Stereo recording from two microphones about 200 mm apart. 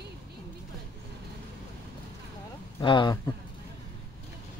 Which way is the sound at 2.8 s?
20° left (ahead or behind).